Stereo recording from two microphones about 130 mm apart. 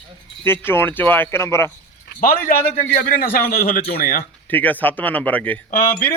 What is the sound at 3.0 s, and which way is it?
Speech, 90° left.